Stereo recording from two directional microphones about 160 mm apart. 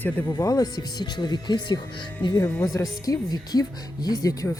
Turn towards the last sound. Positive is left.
turn(degrees=20)  # may be behind; listen again after turning